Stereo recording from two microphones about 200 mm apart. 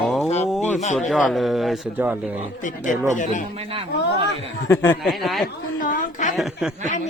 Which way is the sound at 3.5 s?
30° right (ahead or behind).